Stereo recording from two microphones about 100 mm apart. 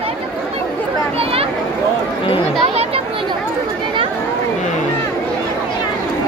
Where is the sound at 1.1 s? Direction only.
75° right (ahead or behind).